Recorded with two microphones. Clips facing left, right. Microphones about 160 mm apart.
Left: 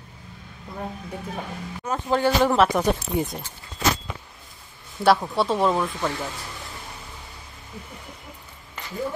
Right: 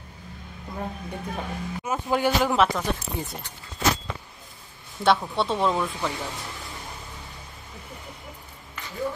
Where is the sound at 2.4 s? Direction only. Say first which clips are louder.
Left 3 dB; centre (ahead or behind).